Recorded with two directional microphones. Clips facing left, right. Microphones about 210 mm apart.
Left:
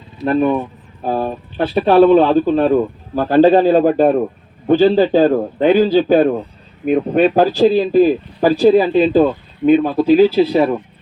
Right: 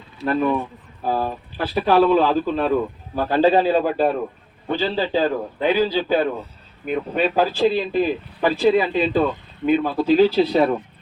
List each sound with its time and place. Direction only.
0.3 s speech: 25° left (ahead or behind)
3.2 s a man's voice: 45° left (ahead or behind)
9.6 s speech: 20° left (ahead or behind)